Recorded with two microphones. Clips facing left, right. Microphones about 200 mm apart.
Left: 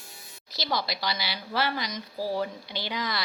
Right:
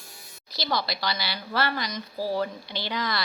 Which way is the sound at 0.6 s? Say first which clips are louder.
Right 1 dB; 15° left (ahead or behind).